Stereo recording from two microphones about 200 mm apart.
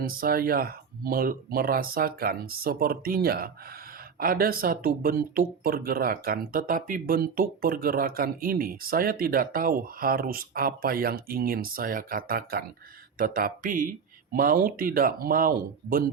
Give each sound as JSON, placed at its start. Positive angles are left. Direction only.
{"t": 0.0, "sound": "speech", "side_deg": -45}